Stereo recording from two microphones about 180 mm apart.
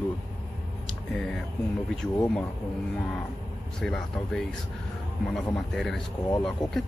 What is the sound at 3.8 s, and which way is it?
Speech, centre (ahead or behind).